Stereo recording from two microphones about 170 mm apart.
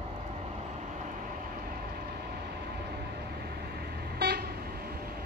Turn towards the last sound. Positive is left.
turn(degrees=-65)  # may be behind; listen again after turning